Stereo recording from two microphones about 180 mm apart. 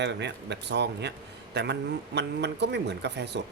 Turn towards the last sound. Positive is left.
turn(degrees=-70)  # may be behind; listen again after turning